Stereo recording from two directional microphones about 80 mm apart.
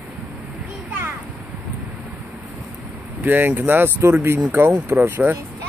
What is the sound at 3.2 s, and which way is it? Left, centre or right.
Speech, right.